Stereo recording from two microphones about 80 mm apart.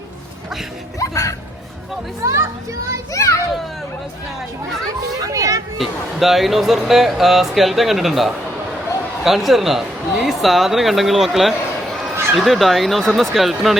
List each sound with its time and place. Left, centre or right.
0.9 s speech: left
2.2 s a child's voice: right
3.1 s a child's voice: left
5.3 s speech: right
5.7 s speech: centre